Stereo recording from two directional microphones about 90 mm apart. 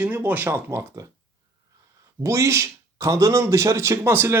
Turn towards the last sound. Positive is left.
turn(degrees=-25)  # may be behind; listen again after turning